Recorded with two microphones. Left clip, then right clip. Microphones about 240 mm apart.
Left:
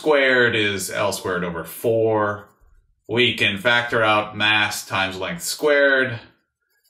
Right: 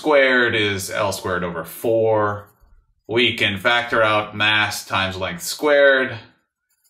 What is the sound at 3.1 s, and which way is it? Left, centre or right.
Speech, right.